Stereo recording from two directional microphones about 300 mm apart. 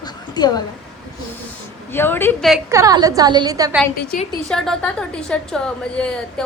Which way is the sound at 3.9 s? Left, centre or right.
Left.